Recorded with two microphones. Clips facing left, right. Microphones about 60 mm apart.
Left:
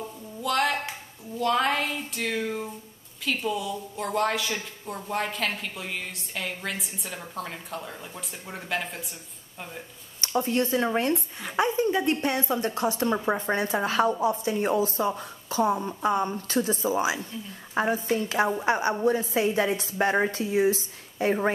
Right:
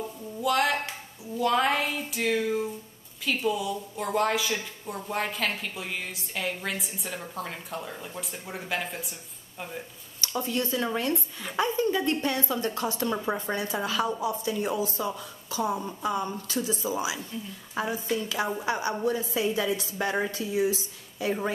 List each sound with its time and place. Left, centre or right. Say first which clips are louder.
0.0 s music: right 2 dB; centre
1.4 s a woman's voice: even; centre
10.2 s a woman's voice: left 4 dB; left
11.4 s a woman's voice: left 2 dB; left
15.7 s speech: left 3 dB; centre
16.0 s a woman's voice: left 4 dB; left